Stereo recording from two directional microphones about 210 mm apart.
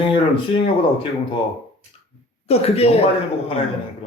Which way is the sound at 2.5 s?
30° left (ahead or behind).